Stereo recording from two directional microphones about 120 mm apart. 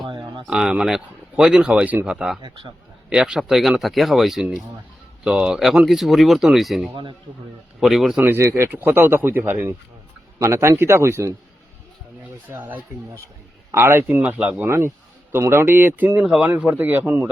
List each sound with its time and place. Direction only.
0.4 s speech: 5° right (ahead or behind)
2.4 s a man's voice: 45° right (ahead or behind)
3.1 s speech: 5° right (ahead or behind)
6.9 s a man's voice: 45° right (ahead or behind)
7.8 s speech: centre (ahead or behind)
8.2 s speech: 20° right (ahead or behind)
13.7 s speech: 20° right (ahead or behind)
14.7 s speech: 20° right (ahead or behind)